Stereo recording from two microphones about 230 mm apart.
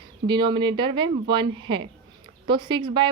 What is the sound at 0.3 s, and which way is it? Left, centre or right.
A woman's voice, centre.